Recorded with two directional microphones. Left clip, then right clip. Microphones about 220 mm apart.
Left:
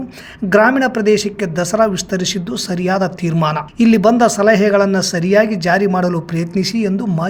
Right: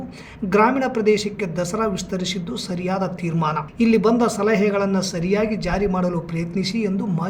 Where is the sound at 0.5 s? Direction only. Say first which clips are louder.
Left 6 dB; 40° left (ahead or behind).